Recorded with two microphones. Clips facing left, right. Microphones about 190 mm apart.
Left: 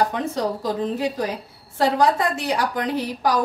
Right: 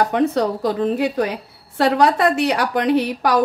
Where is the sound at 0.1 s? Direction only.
65° right (ahead or behind).